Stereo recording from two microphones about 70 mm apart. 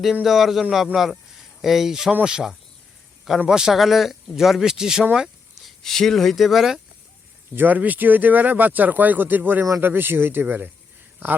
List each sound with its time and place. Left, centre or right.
0.0 s speech: centre
5.1 s a sound: centre
5.8 s speech: centre
7.5 s speech: right